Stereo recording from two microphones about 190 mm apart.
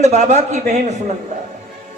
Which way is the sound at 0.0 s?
40° right (ahead or behind).